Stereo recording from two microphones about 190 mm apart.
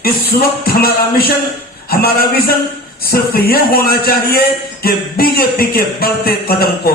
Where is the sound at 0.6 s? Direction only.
50° left (ahead or behind).